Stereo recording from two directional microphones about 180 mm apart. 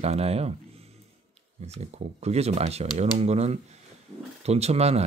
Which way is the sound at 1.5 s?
35° right (ahead or behind).